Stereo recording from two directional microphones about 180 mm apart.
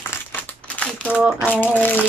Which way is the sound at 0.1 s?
10° left (ahead or behind).